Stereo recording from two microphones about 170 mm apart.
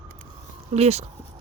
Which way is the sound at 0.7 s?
40° right (ahead or behind).